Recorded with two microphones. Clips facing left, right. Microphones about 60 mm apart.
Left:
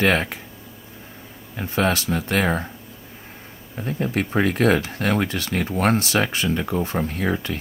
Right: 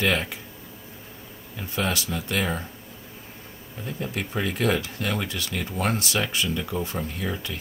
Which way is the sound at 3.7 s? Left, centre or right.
Left.